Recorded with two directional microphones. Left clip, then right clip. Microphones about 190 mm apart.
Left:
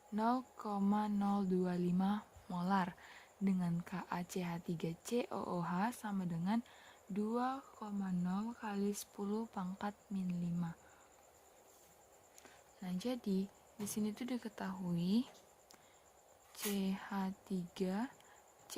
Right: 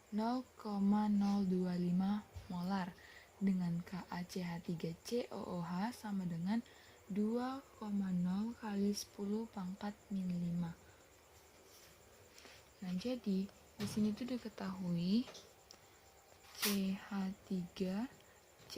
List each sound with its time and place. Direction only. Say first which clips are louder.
0.2 s speech: left 4 dB; 50° left (ahead or behind)
12.8 s speech: even; 40° left (ahead or behind)
16.8 s speech: left 2 dB; 45° left (ahead or behind)
18.7 s a sound: even; 45° left (ahead or behind)